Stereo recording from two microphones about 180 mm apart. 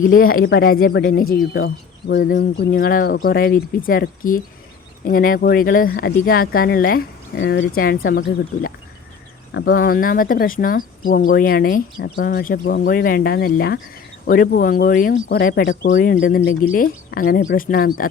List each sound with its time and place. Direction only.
0.0 s speech: 50° left (ahead or behind)
7.3 s speech: 75° left (ahead or behind); by 8.2 s 55° left (ahead or behind)
9.7 s speech: 55° left (ahead or behind)